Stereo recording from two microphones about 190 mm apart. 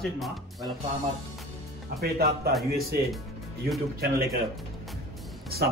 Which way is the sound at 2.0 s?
55° right (ahead or behind).